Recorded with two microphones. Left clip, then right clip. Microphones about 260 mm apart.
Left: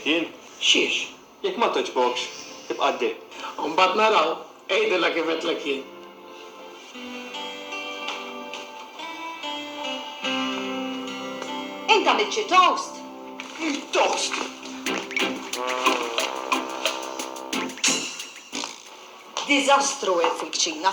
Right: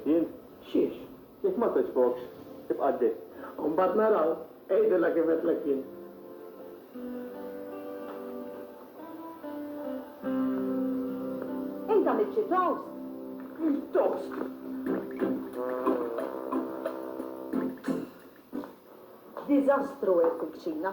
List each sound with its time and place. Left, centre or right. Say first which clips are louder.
0.0 s a man's voice: left 3 dB; centre
7.3 s music: left 7 dB; centre
9.8 s music: left 9 dB; centre
19.4 s a woman's voice: left 6 dB; centre